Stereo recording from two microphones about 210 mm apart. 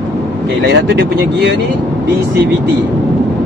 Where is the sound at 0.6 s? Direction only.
50° right (ahead or behind).